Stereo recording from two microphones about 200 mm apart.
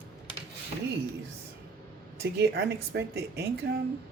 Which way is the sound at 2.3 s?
55° right (ahead or behind).